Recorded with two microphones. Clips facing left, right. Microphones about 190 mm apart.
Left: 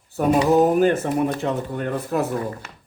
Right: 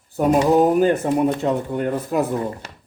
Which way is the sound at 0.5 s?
15° right (ahead or behind).